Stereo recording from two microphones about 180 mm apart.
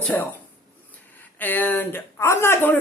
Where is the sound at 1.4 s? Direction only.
10° left (ahead or behind).